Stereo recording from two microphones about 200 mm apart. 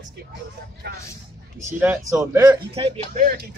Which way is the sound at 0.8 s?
55° right (ahead or behind).